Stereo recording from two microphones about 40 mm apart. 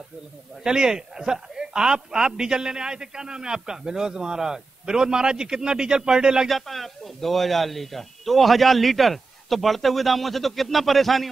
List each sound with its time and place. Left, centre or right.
0.7 s a man's voice: centre
6.5 s a man's voice: centre